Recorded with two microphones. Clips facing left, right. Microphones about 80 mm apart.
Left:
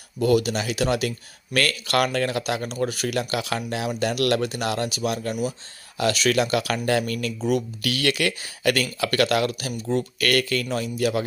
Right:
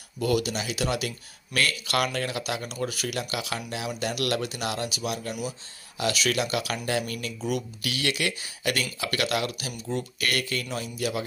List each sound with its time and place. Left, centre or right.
0.2 s speech: left
10.2 s speech: left